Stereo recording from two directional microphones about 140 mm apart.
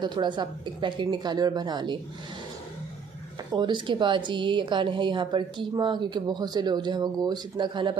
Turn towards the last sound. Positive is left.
turn(degrees=-35)  # may be behind; listen again after turning